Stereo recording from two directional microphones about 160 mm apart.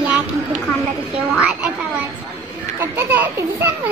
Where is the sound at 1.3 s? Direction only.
5° right (ahead or behind).